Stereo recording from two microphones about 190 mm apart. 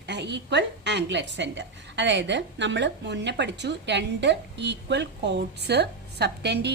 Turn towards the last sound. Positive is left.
turn(degrees=-60)  # may be behind; listen again after turning